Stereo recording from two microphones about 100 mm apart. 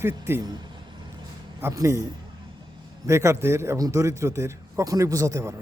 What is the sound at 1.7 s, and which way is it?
Speech, 35° right (ahead or behind).